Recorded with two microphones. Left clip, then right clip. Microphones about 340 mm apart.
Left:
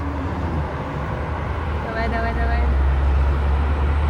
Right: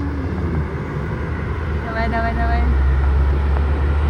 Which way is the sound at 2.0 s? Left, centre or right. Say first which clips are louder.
Right 4 dB; centre.